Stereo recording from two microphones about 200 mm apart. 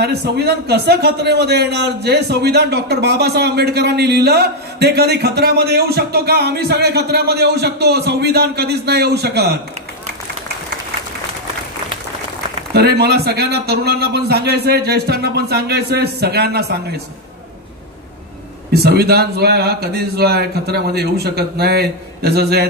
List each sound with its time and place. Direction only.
0.0 s a man's voice: 55° right (ahead or behind)
12.7 s a man's voice: 55° right (ahead or behind)
18.7 s a man's voice: 50° right (ahead or behind)